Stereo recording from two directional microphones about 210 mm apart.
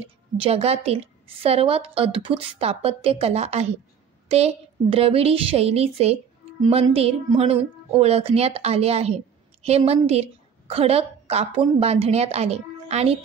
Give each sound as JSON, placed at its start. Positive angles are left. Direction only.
{"t": 0.0, "sound": "a woman's voice", "side_deg": -30}